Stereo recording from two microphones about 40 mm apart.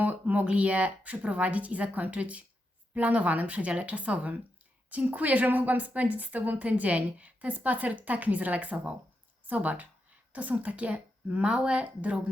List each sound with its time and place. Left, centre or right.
0.0 s a sound: right
0.4 s a woman's voice: right
11.4 s speech: right